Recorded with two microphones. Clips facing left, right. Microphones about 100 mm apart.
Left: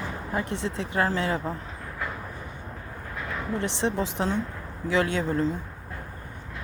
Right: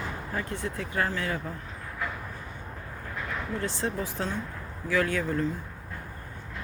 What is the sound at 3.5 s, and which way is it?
Speech, 20° left (ahead or behind).